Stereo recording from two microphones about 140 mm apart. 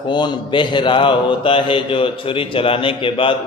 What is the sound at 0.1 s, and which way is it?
A man's voice, 35° left (ahead or behind).